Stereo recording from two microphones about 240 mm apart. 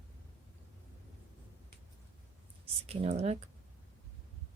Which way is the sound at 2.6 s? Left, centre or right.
Right.